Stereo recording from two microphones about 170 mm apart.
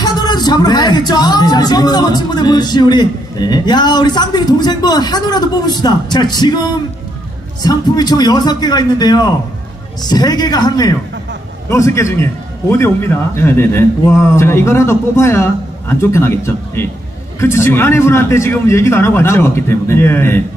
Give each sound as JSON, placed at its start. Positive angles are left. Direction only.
{"t": 0.0, "sound": "a man's voice", "side_deg": 25}